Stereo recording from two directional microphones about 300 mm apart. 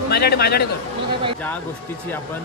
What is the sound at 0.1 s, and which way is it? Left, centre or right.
Speech, left.